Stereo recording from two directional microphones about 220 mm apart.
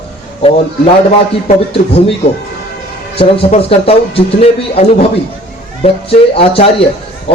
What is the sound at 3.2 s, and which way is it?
A man's voice, 25° left (ahead or behind).